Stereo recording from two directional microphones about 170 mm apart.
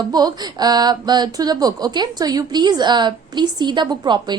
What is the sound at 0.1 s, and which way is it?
A woman's voice, 25° right (ahead or behind).